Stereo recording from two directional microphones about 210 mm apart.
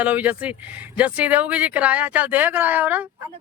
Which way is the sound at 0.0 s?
5° right (ahead or behind).